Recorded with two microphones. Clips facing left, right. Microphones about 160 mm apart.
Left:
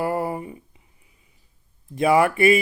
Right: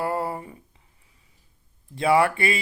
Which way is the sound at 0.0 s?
25° left (ahead or behind).